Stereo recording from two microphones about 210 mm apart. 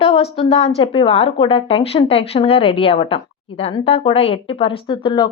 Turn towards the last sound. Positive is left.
turn(degrees=20)  # may be behind; listen again after turning